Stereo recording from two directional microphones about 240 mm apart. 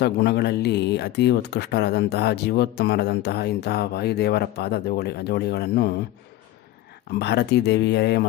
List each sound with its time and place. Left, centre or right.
0.0 s speech: left
7.1 s speech: left